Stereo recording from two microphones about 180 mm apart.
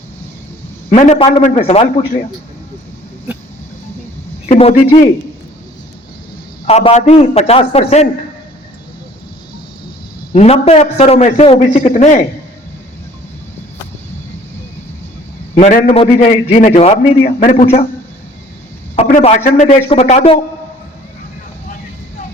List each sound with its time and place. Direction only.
0.9 s a man's voice: 40° left (ahead or behind)
4.4 s a man's voice: 35° left (ahead or behind)
6.7 s a man's voice: 35° left (ahead or behind)
10.3 s a man's voice: 35° left (ahead or behind)
15.5 s a man's voice: 45° left (ahead or behind)
18.9 s a man's voice: 35° left (ahead or behind)